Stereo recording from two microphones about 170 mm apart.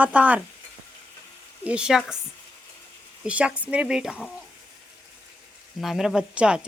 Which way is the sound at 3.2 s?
5° right (ahead or behind).